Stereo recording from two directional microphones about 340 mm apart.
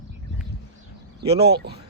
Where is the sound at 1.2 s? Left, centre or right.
Right.